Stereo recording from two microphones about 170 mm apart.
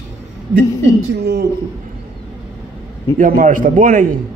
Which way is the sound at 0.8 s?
85° right.